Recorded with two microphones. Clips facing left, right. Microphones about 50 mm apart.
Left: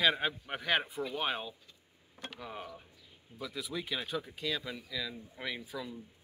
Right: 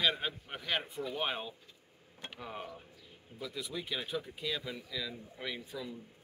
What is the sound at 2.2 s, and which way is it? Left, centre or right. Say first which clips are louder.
Speech: even; centre.